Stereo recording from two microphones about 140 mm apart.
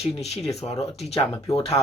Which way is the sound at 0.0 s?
50° left (ahead or behind).